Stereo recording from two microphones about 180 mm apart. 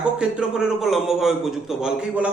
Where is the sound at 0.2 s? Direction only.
5° right (ahead or behind).